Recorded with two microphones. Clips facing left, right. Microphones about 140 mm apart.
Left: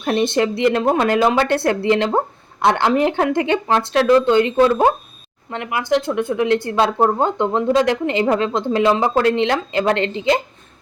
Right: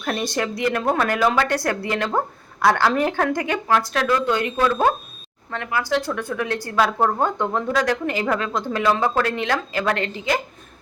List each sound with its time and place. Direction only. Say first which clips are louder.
0.0 s speech: left 7 dB; 25° left (ahead or behind)